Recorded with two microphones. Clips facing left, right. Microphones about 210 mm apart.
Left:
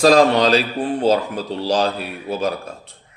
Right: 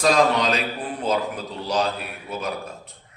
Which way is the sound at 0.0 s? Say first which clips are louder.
Left 6 dB; 30° left (ahead or behind).